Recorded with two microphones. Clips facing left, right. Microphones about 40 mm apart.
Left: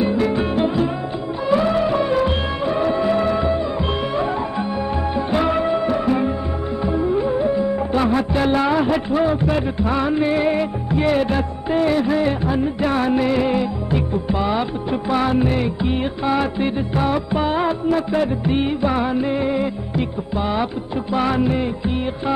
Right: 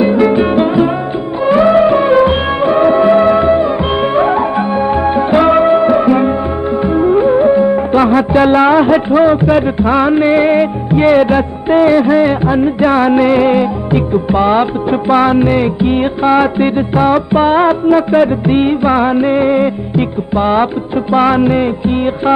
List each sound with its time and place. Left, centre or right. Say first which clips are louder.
0.0 s music: right 9 dB; right
1.4 s music: right 10 dB; right
8.3 s music of bollywood: right 10 dB; right
21.4 s music: right 8 dB; right